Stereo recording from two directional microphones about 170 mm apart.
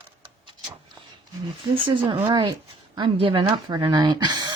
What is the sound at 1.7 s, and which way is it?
Speech, 30° right (ahead or behind).